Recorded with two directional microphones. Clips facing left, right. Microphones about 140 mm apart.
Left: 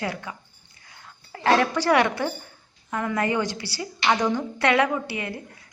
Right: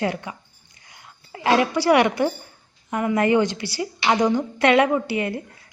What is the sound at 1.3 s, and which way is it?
A woman's voice, 10° right (ahead or behind).